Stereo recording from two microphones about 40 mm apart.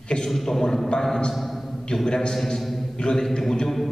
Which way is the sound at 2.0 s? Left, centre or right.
Centre.